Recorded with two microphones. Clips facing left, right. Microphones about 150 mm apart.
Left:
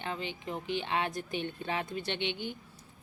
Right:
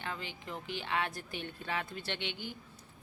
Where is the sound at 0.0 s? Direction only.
20° left (ahead or behind).